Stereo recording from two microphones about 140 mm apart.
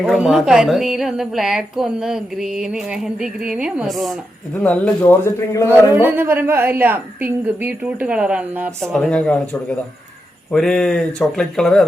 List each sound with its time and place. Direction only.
0.0 s a woman's voice: 5° right (ahead or behind)
4.6 s a man's voice: 10° left (ahead or behind)
5.9 s a woman's voice: 15° right (ahead or behind)
8.9 s a man's voice: 5° left (ahead or behind)